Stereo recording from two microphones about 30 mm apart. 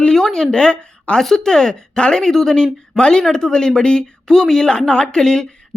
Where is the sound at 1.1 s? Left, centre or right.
Left.